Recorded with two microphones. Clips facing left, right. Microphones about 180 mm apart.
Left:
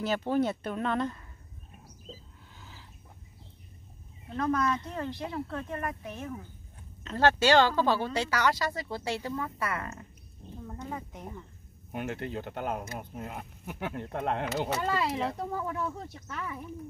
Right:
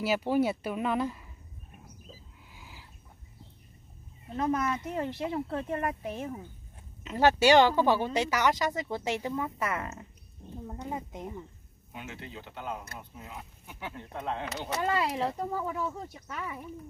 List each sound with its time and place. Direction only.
0.0 s speech: 10° right (ahead or behind)
2.5 s a sound: 10° right (ahead or behind)
4.4 s speech: 20° right (ahead or behind)
7.0 s speech: 10° right (ahead or behind)
11.9 s speech: 55° left (ahead or behind)
14.8 s speech: 5° right (ahead or behind)